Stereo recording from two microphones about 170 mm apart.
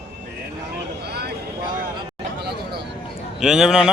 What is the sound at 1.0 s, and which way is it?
Speech, 70° right (ahead or behind).